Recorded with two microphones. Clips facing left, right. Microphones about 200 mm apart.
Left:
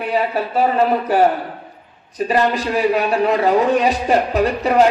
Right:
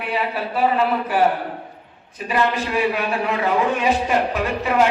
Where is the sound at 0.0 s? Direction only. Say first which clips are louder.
Left 5 dB; 40° left (ahead or behind).